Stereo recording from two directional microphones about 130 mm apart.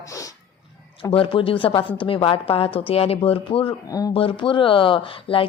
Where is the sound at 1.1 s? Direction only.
45° left (ahead or behind).